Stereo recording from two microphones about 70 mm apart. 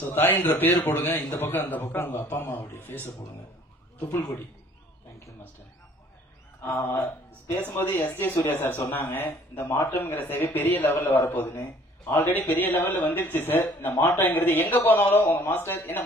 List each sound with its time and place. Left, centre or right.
0.0 s a man's voice: left
6.6 s a man's voice: left